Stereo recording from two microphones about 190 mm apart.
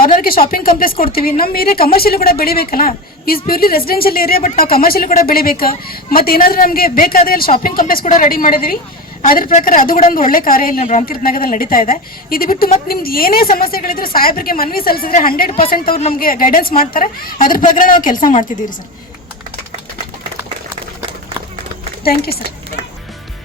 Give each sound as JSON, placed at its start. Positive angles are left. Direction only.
{"t": 0.0, "sound": "speech", "side_deg": 50}